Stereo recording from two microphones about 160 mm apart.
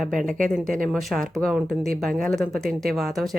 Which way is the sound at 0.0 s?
Centre (ahead or behind).